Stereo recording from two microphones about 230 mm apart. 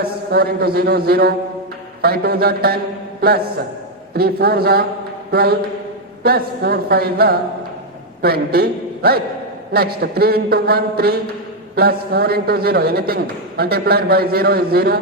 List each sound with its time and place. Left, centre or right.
0.3 s a man's voice: right